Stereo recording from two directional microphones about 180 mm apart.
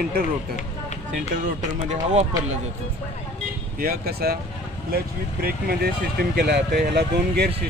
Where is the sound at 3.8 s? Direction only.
55° right (ahead or behind).